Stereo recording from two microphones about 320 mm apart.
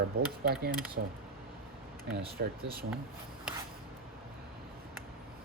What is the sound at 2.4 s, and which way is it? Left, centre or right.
Speech, right.